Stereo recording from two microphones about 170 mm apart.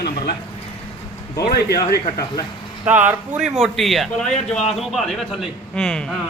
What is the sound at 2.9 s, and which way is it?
A man's voice, 10° right (ahead or behind).